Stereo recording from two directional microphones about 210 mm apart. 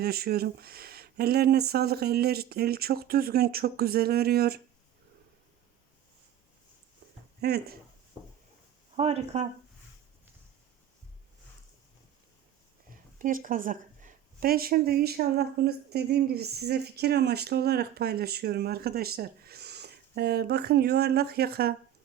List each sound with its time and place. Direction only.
0.0 s speech: 45° right (ahead or behind)
7.4 s speech: 50° right (ahead or behind)
9.0 s speech: 30° right (ahead or behind)
12.9 s speech: 40° right (ahead or behind)